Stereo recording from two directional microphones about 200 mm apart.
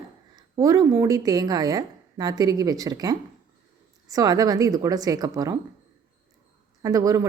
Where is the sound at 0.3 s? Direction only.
20° right (ahead or behind).